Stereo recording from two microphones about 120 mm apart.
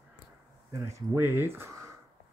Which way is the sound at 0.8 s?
20° right (ahead or behind).